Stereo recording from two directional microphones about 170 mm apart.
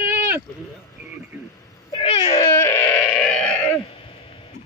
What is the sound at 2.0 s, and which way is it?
Speech, 35° left (ahead or behind).